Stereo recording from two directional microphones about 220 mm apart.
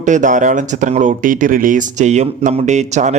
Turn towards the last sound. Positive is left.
turn(degrees=-30)  # may be behind; listen again after turning